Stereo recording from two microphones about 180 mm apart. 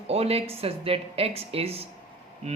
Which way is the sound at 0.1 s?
35° right (ahead or behind).